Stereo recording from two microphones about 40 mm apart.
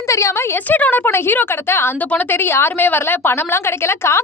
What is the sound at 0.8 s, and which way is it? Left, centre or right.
Speech, left.